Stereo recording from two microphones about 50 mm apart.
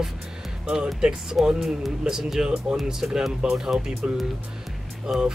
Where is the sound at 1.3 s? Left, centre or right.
Centre.